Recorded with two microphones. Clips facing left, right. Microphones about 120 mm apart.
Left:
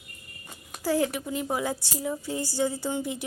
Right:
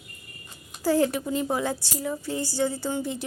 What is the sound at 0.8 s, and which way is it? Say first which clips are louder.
A woman's voice: right 3 dB; 5° left (ahead or behind).